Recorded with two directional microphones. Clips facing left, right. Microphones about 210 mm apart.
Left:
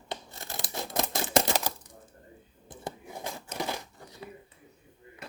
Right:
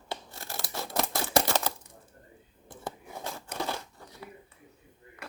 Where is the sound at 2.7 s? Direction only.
15° left (ahead or behind).